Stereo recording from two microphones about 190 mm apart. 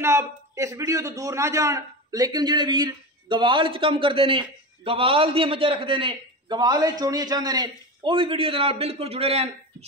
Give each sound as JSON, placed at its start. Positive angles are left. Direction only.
{"t": 0.0, "sound": "a man's voice", "side_deg": -15}